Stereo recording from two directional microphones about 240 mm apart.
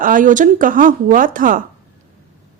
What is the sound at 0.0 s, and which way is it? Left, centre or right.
A woman's voice, right.